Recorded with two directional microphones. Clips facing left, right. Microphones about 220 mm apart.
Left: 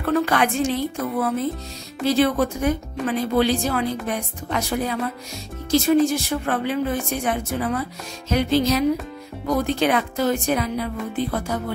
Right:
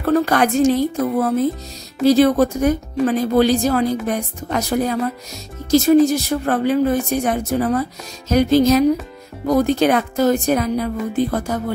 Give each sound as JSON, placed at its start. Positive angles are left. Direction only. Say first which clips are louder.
{"t": 0.0, "sound": "speech", "louder": "right 4 dB", "side_deg": -40}